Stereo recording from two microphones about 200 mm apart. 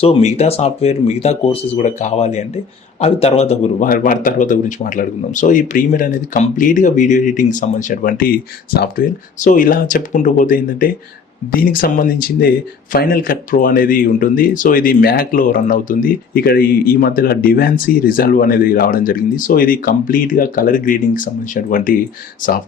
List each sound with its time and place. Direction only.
0.0 s speech: 30° left (ahead or behind)